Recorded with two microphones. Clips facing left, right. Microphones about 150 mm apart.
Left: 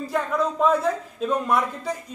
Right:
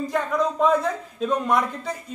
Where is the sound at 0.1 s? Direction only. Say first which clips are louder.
Left 1 dB; 5° left (ahead or behind).